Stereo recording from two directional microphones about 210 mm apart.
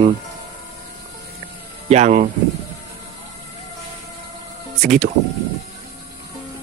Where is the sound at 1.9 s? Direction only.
35° right (ahead or behind).